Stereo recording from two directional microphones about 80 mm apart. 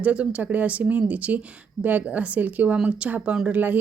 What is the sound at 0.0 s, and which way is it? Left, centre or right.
Speech, centre.